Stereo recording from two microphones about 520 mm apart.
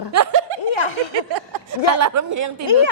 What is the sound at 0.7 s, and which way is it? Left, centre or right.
Snicker, left.